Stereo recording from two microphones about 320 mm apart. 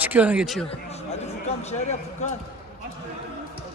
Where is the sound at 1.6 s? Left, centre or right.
Left.